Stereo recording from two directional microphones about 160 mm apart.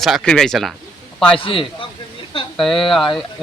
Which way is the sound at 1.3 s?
35° left (ahead or behind).